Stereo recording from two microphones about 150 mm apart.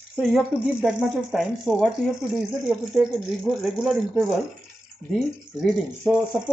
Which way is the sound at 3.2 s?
5° right (ahead or behind).